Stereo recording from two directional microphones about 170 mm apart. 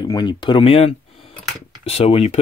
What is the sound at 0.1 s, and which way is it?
Speech, 25° left (ahead or behind).